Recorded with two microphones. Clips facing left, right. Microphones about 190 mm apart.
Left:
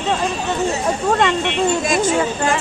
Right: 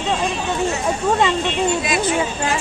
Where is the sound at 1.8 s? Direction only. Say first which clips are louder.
Left 3 dB; 45° left (ahead or behind).